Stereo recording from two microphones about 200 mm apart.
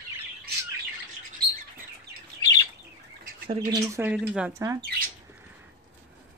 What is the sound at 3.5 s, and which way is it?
Speech, 20° right (ahead or behind).